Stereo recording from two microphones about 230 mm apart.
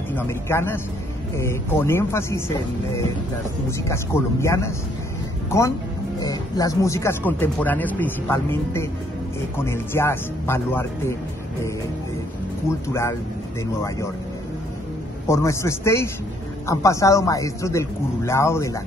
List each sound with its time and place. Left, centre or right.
0.1 s speech: centre
3.7 s speech: centre
6.1 s speech: centre
12.6 s speech: centre
13.8 s speech: centre
15.2 s speech: centre